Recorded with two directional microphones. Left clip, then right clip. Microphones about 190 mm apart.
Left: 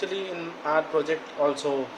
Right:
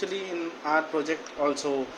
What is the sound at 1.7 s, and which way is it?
Speech, 35° right (ahead or behind).